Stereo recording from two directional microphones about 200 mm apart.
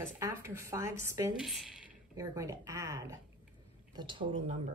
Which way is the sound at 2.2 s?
15° right (ahead or behind).